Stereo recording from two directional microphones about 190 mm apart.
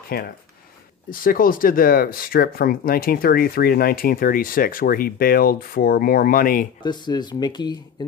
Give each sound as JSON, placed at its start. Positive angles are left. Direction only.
{"t": 0.1, "sound": "speech", "side_deg": 50}
{"t": 6.8, "sound": "speech", "side_deg": 25}